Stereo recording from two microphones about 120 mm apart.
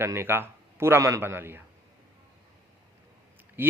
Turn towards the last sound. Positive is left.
turn(degrees=-15)  # may be behind; listen again after turning